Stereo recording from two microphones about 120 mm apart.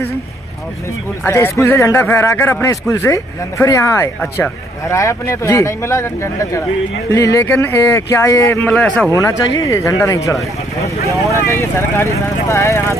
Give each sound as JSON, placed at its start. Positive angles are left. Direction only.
{"t": 1.2, "sound": "speech", "side_deg": 20}
{"t": 8.6, "sound": "a man's voice", "side_deg": 10}
{"t": 9.1, "sound": "speech", "side_deg": 25}